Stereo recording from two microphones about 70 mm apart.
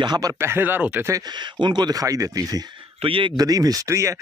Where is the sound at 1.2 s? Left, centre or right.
Right.